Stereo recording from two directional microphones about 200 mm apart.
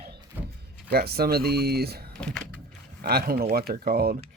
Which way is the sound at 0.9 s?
50° right (ahead or behind).